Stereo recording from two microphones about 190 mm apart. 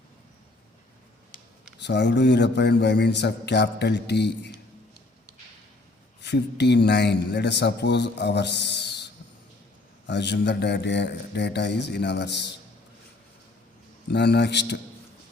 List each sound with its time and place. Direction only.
1.8 s a man's voice: 65° left (ahead or behind)
6.2 s a man's voice: 65° left (ahead or behind)
10.1 s a man's voice: 65° left (ahead or behind)
14.1 s a man's voice: 60° left (ahead or behind)